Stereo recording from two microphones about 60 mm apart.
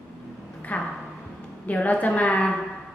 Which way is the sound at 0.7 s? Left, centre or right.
Left.